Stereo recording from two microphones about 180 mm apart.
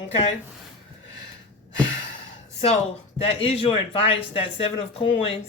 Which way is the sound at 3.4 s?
30° left (ahead or behind).